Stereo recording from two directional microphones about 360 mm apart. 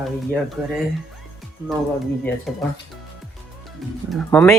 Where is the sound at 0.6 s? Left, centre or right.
Centre.